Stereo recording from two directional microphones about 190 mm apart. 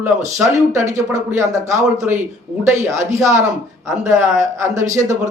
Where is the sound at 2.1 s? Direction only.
10° right (ahead or behind).